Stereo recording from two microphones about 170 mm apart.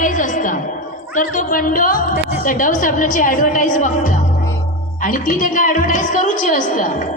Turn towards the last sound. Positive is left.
turn(degrees=50)  # may be behind; listen again after turning